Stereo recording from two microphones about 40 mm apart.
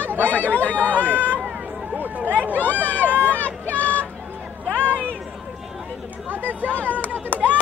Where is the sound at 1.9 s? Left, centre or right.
Right.